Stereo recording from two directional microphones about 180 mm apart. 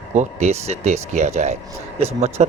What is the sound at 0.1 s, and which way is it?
A man's voice, 40° right (ahead or behind).